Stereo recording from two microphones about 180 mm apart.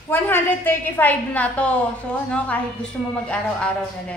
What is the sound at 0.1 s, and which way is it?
A woman's voice, 10° left (ahead or behind).